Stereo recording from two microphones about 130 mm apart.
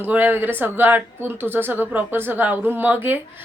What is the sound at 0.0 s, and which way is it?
Speech, 15° right (ahead or behind).